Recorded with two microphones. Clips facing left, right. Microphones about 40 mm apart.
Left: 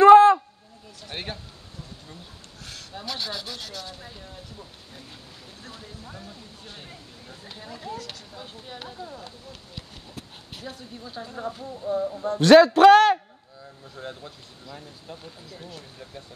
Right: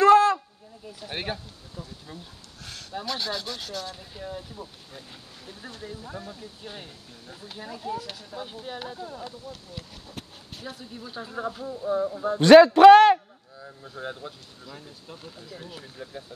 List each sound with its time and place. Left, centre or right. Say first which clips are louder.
0.0 s a sound: left 5 dB; left
1.0 s speech: right 3 dB; centre
2.6 s speech: right 3 dB; centre
4.2 s speech: right 6 dB; centre
5.7 s speech: right 4 dB; centre
7.2 s speech: right 3 dB; centre
7.9 s speech: right 5 dB; centre
10.6 s speech: even; centre